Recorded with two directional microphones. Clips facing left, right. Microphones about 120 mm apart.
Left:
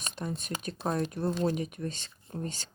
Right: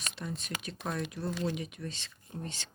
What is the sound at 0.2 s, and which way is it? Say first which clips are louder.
Speech: left 5 dB; 45° left (ahead or behind).